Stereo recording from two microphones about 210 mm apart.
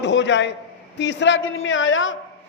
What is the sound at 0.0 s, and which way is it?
A man's voice, 60° left (ahead or behind).